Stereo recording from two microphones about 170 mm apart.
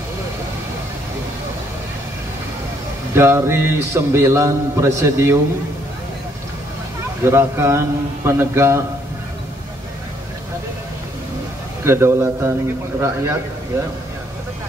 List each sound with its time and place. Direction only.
3.2 s a man's voice: 15° right (ahead or behind)
7.2 s a man's voice: 15° right (ahead or behind)
11.8 s a man's voice: 15° right (ahead or behind)